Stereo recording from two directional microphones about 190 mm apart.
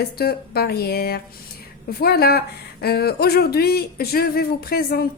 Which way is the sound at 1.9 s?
55° left (ahead or behind).